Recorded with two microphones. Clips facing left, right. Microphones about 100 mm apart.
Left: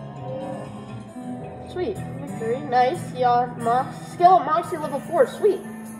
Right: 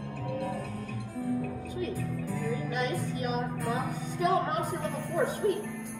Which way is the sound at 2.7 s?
90° left.